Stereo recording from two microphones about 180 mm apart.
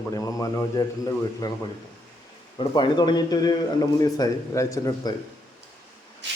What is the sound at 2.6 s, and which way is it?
A man's voice, 25° left (ahead or behind).